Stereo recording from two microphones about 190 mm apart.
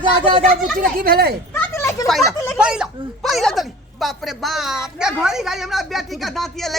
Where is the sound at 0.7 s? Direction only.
50° right (ahead or behind).